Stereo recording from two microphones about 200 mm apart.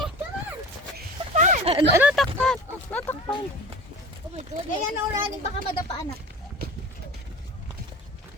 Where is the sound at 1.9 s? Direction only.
5° right (ahead or behind).